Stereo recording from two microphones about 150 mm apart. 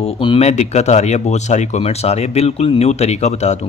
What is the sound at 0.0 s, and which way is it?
Speech, 40° left (ahead or behind).